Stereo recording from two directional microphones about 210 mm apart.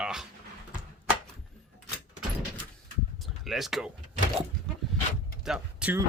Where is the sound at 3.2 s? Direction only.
Centre (ahead or behind).